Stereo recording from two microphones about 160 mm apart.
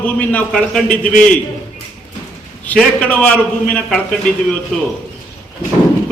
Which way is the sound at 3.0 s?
10° left (ahead or behind).